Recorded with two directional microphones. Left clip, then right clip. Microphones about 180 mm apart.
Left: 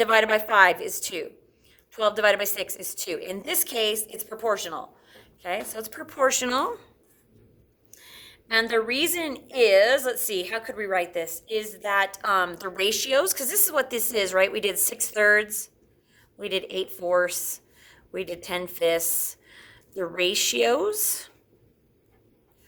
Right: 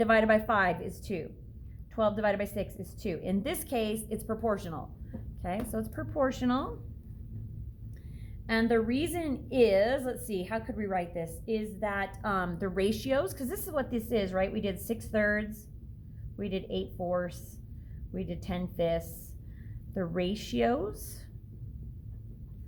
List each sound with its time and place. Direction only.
0.0 s a woman's voice: 30° left (ahead or behind)
8.1 s a woman's voice: 30° left (ahead or behind)